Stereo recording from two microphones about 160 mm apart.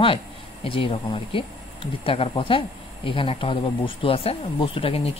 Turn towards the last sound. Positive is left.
turn(degrees=35)  # may be behind; listen again after turning